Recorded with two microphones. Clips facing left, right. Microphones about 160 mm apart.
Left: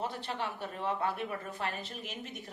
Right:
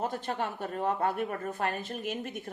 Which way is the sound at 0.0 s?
45° right (ahead or behind).